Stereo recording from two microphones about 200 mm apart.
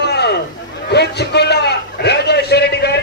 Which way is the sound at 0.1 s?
55° left (ahead or behind).